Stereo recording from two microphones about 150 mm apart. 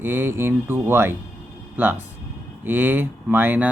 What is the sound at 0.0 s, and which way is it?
Speech, 15° right (ahead or behind).